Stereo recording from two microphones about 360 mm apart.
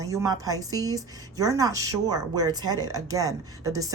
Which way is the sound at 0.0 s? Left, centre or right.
Centre.